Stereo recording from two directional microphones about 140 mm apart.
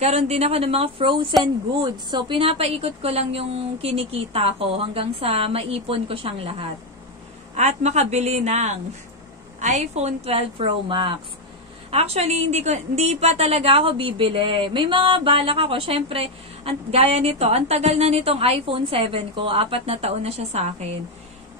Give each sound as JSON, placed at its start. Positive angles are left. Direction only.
{"t": 0.0, "sound": "a woman's voice", "side_deg": -50}
{"t": 7.5, "sound": "a woman's voice", "side_deg": -55}
{"t": 11.9, "sound": "a woman's voice", "side_deg": -45}